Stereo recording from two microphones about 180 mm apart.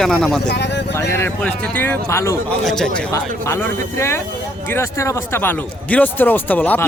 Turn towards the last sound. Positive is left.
turn(degrees=10)  # may be behind; listen again after turning